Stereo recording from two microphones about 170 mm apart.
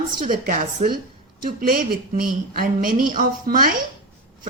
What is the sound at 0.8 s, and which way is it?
Speech, 40° right (ahead or behind).